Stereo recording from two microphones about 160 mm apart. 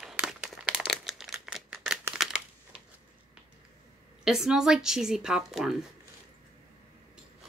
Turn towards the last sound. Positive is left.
turn(degrees=0)  # may be behind; listen again after turning